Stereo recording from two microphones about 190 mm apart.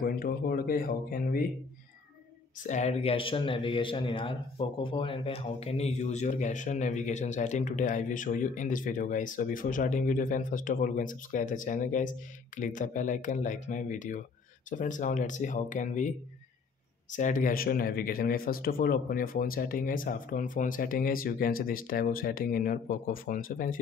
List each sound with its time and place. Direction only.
0.0 s speech: 50° left (ahead or behind)
2.6 s a man's voice: 40° left (ahead or behind)